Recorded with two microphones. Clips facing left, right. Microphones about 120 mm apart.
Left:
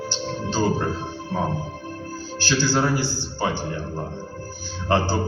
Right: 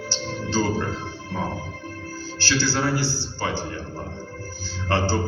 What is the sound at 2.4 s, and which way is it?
Music, 15° left (ahead or behind).